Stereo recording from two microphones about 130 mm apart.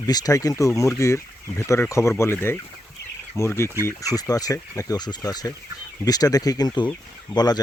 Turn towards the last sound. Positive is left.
turn(degrees=30)  # may be behind; listen again after turning